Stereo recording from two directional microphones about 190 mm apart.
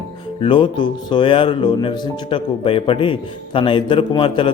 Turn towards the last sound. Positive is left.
turn(degrees=25)  # may be behind; listen again after turning